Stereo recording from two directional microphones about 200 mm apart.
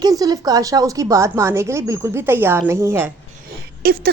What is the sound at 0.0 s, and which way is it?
Speech, 20° right (ahead or behind).